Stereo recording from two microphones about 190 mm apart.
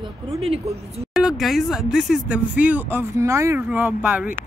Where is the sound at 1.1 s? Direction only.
Centre (ahead or behind).